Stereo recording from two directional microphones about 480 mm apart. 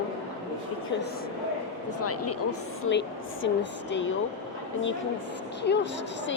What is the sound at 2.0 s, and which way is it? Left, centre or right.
A woman's voice, left.